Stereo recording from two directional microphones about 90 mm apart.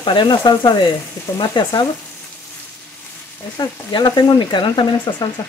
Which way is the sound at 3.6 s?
50° left (ahead or behind).